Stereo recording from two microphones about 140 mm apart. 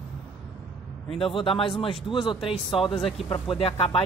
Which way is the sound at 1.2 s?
40° left (ahead or behind).